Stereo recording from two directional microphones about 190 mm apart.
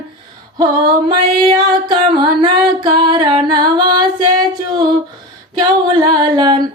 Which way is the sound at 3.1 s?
25° right (ahead or behind).